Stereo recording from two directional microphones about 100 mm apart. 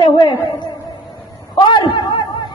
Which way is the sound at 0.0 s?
50° left (ahead or behind).